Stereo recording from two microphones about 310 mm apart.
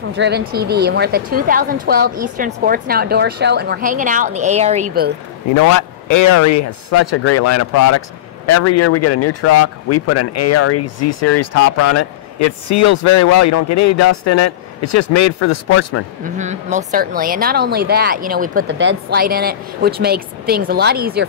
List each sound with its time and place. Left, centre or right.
0.1 s speech: right
5.5 s speech: left
16.3 s speech: right